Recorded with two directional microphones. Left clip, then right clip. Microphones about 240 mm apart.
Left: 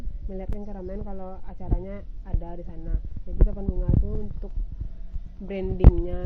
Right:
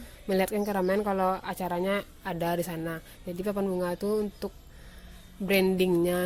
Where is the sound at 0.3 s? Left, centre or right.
Right.